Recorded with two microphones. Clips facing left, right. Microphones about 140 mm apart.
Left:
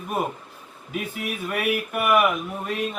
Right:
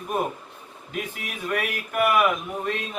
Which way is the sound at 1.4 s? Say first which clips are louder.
Left 2 dB; 5° left (ahead or behind).